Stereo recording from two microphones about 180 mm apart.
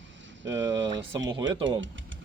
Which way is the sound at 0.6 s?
90° right.